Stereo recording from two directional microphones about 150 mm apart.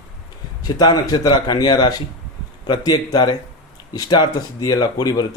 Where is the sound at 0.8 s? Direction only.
30° left (ahead or behind).